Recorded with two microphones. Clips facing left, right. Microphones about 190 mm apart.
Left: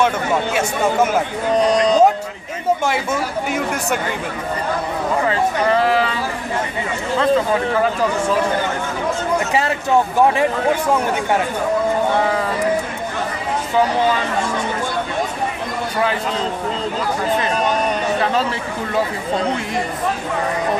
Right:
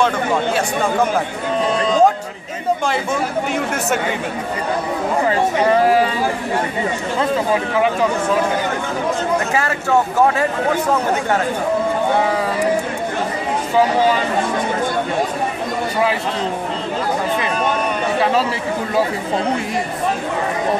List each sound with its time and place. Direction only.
1.6 s speech: 40° left (ahead or behind)
5.9 s speech: 40° right (ahead or behind)
9.6 s speech: 20° left (ahead or behind)